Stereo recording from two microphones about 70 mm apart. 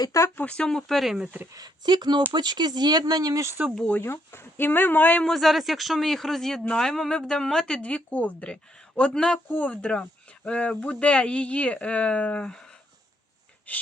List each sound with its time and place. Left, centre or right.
0.4 s speech: centre
1.5 s speech: right
3.8 s speech: left
4.1 s speech: left
5.2 s a man's voice: centre
13.7 s gasp: left